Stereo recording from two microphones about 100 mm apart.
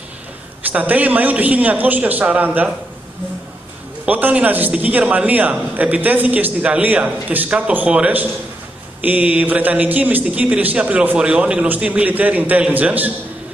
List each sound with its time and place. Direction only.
0.7 s a man's voice: 15° right (ahead or behind)
4.0 s a man's voice: 15° right (ahead or behind)